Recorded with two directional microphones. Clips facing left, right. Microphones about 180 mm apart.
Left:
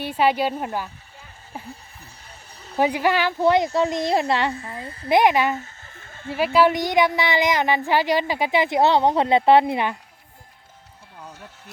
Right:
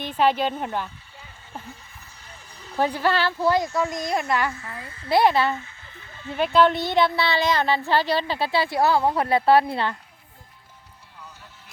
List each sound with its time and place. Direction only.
0.0 s speech: 10° left (ahead or behind)
2.7 s a child's voice: 15° left (ahead or behind); by 5.0 s 30° left (ahead or behind)
5.0 s speech: 15° left (ahead or behind)
5.5 s a sound: 45° left (ahead or behind)
6.3 s speech: 10° left (ahead or behind)
11.2 s vehicle: 50° left (ahead or behind)